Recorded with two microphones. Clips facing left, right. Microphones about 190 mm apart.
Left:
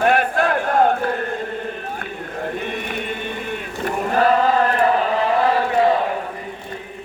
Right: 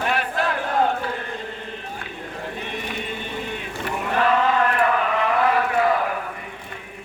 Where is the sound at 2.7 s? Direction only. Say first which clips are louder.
Left 3 dB; 55° left (ahead or behind).